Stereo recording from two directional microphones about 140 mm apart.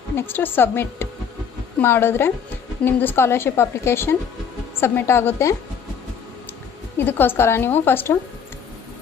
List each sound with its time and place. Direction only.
0.2 s a woman's voice: 15° left (ahead or behind)
6.9 s a woman's voice: 15° left (ahead or behind)